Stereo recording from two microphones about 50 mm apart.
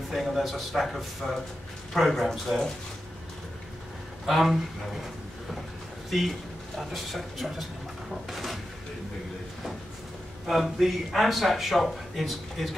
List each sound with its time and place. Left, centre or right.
0.1 s a man's voice: centre
4.3 s a man's voice: centre
6.0 s a man's voice: centre
8.1 s a sound: centre
10.4 s a man's voice: centre